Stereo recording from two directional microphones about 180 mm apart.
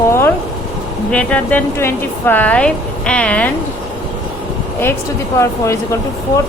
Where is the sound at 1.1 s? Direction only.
5° left (ahead or behind).